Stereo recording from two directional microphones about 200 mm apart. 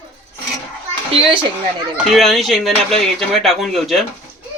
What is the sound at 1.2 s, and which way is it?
Speech, 25° right (ahead or behind).